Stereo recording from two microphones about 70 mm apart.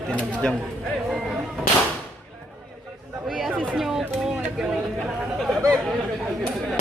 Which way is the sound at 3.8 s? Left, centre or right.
Centre.